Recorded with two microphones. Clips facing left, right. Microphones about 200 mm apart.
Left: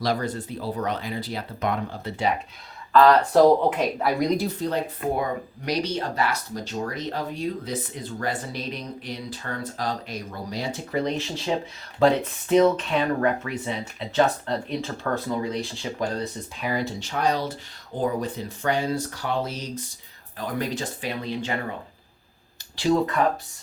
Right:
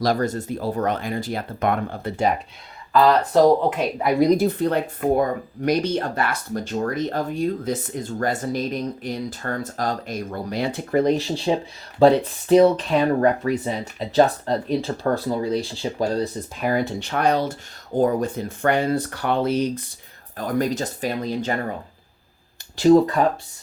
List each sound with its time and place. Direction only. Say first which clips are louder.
0.0 s speech: right 4 dB; 45° right (ahead or behind)
2.9 s speech: even; 5° right (ahead or behind)
4.3 s speech: right 6 dB; 50° right (ahead or behind)
11.2 s speech: right 4 dB; 30° right (ahead or behind)
16.6 s speech: right 5 dB; 50° right (ahead or behind)
17.9 s speech: right 6 dB; 45° right (ahead or behind)
20.3 s speech: right 6 dB; 45° right (ahead or behind)
22.7 s speech: right 7 dB; 45° right (ahead or behind)